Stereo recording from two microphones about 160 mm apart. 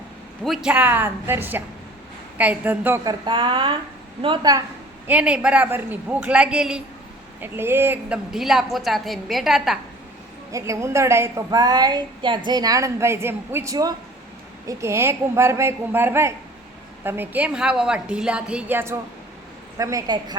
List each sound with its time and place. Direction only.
0.4 s a woman's voice: 5° right (ahead or behind)
3.0 s a woman's voice: 25° right (ahead or behind)
5.0 s a woman's voice: 10° right (ahead or behind)
8.3 s a woman's voice: centre (ahead or behind)
10.5 s a woman's voice: 20° right (ahead or behind)